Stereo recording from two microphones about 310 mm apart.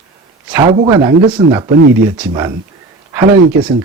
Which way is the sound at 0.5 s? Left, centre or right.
Centre.